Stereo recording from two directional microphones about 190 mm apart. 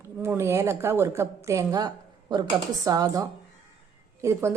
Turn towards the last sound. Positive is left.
turn(degrees=-15)  # may be behind; listen again after turning